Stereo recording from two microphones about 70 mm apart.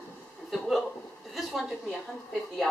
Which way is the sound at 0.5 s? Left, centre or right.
Centre.